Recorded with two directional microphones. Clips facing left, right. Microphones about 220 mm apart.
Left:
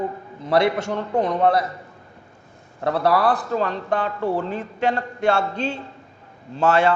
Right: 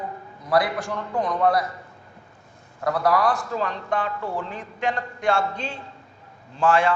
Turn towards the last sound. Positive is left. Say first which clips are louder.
# left 2 dB
turn(degrees=25)  # may be behind; listen again after turning